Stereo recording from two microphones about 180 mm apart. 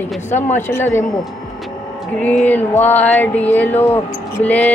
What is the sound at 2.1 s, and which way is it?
Music, 5° left (ahead or behind).